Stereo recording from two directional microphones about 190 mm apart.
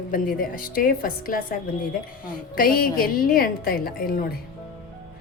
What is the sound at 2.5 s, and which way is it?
A woman's voice, 50° left (ahead or behind).